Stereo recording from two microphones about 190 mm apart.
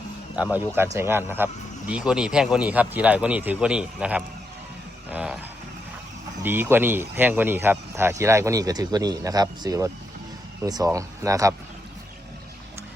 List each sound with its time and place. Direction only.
0.3 s speech: 5° right (ahead or behind)
6.4 s speech: 10° right (ahead or behind)